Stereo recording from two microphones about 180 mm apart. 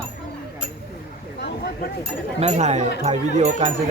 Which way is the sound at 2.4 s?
40° right (ahead or behind).